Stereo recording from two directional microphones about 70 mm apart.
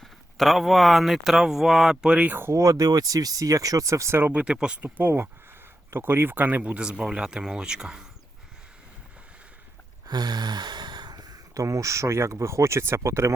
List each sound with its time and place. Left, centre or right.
0.0 s speech: centre
2.0 s speech: centre
2.5 s speech: right
4.2 s speech: centre
4.8 s speech: right; by 8.0 s centre
10.1 s speech: right